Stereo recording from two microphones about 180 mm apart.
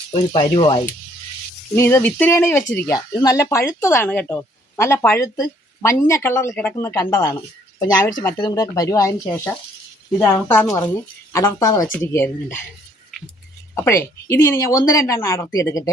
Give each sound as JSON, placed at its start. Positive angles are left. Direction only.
{"t": 0.1, "sound": "speech", "side_deg": 30}
{"t": 1.7, "sound": "speech", "side_deg": 15}
{"t": 13.7, "sound": "speech", "side_deg": 15}